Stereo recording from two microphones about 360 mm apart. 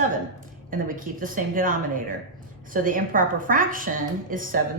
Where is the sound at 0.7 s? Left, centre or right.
Right.